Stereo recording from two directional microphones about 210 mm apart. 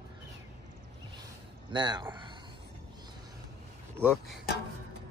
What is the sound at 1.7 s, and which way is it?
Speech, 20° right (ahead or behind).